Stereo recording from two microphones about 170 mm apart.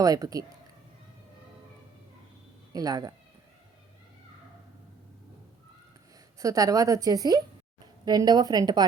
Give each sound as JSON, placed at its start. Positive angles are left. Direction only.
{"t": 0.0, "sound": "a woman's voice", "side_deg": -20}
{"t": 2.7, "sound": "a woman's voice", "side_deg": -20}
{"t": 6.4, "sound": "a woman's voice", "side_deg": -20}